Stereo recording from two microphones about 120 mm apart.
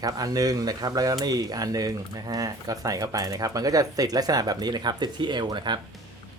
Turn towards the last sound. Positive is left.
turn(degrees=-40)  # may be behind; listen again after turning